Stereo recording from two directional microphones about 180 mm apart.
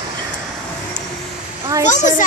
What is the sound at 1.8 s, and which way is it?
Speech, 45° left (ahead or behind).